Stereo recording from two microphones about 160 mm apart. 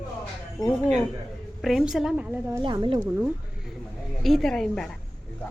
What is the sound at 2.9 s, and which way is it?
Speech, 10° right (ahead or behind).